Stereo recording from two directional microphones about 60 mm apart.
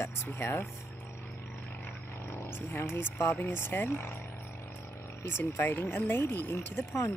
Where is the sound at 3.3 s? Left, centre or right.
Left.